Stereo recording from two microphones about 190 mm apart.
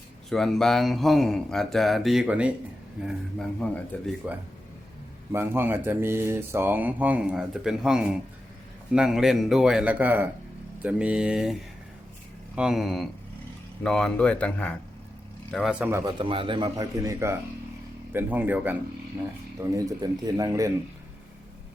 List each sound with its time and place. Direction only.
0.3 s speech: centre (ahead or behind)
5.3 s speech: 10° right (ahead or behind)
12.5 s speech: centre (ahead or behind)
16.1 s a man's voice: 25° right (ahead or behind); by 18.8 s 10° right (ahead or behind)
19.7 s speech: 20° right (ahead or behind)